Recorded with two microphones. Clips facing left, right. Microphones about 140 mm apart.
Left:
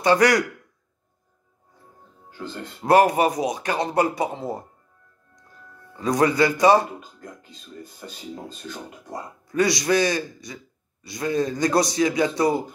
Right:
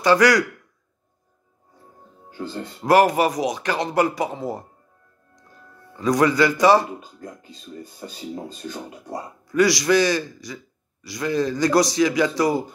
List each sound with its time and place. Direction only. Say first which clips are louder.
0.0 s a man's voice: right 1 dB; 25° left (ahead or behind)
2.8 s a man's voice: even; 25° left (ahead or behind)
5.9 s a man's voice: right 1 dB; 30° left (ahead or behind)
9.5 s a man's voice: right 3 dB; 25° left (ahead or behind)